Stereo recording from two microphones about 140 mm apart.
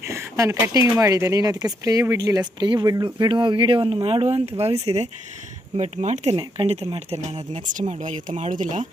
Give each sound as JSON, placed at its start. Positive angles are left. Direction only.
{"t": 0.0, "sound": "speech", "side_deg": -20}